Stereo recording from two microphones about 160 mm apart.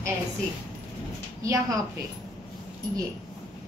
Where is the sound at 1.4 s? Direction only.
20° right (ahead or behind).